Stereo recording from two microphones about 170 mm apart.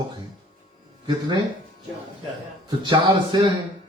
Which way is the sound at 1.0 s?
25° right (ahead or behind).